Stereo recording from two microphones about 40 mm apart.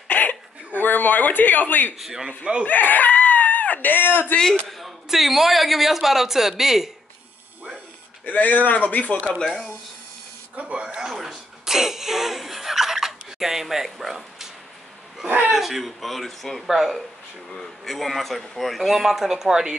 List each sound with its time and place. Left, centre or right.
0.1 s a sound: left
0.7 s speech: left
2.0 s speech: centre
2.2 s speech: right
2.6 s screaming: left
4.6 s speech: centre
8.3 s speech: left
10.6 s speech: right
11.1 s a sound: centre
15.2 s speech: right
15.5 s speech: centre
16.6 s speech: centre
17.6 s speech: centre